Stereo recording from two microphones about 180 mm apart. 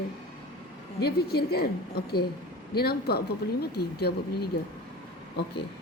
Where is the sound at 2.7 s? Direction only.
60° left (ahead or behind).